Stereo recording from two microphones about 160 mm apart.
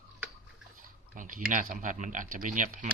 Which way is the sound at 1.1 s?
55° right (ahead or behind).